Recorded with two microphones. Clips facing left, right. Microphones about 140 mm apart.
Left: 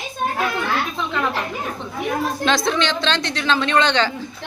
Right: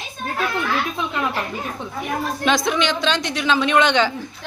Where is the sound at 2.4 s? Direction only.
15° right (ahead or behind).